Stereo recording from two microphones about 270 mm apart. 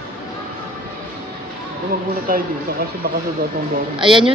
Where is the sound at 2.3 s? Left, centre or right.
Right.